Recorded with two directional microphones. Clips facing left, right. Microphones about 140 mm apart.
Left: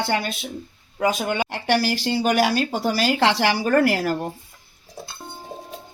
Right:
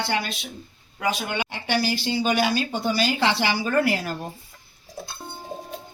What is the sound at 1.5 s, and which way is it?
Speech, 75° left (ahead or behind).